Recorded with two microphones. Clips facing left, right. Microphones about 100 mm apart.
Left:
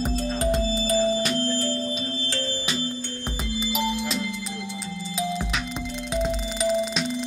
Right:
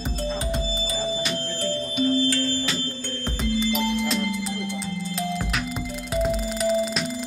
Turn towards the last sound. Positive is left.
turn(degrees=0)  # may be behind; listen again after turning